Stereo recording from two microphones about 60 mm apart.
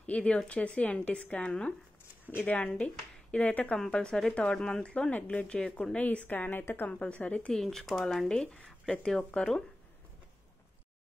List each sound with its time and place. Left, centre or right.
0.0 s speech: left
2.7 s speech: centre
3.7 s speech: centre
5.9 s speech: left
7.5 s speech: centre